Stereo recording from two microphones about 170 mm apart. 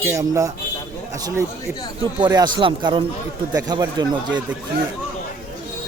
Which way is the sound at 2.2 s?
25° right (ahead or behind).